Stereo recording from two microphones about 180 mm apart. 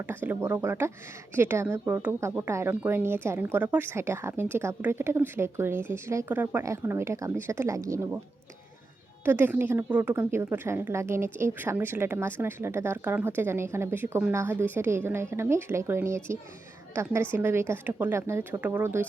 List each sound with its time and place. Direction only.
0.0 s a woman's voice: 10° right (ahead or behind)
9.2 s a woman's voice: 10° right (ahead or behind)